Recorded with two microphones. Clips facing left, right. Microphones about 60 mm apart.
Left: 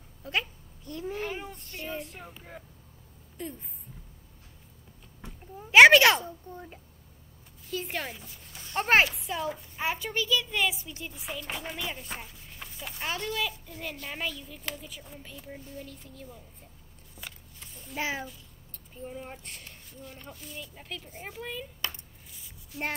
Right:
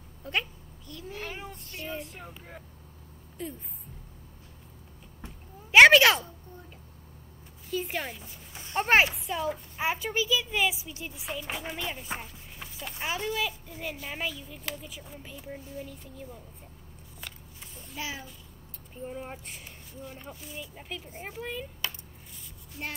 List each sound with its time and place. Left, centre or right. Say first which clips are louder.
0.2 s a child's voice: even; centre
0.9 s a child's voice: left 6 dB; left
1.2 s a child's voice: left 3 dB; centre
5.7 s a child's voice: even; centre
7.7 s a child's voice: right 2 dB; centre
17.9 s a child's voice: left 5 dB; left
19.0 s a child's voice: right 2 dB; centre